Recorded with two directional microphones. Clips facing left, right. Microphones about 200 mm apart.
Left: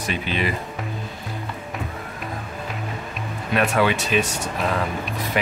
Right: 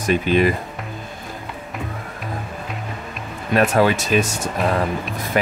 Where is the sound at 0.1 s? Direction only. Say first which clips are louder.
Right 9 dB; 45° right (ahead or behind).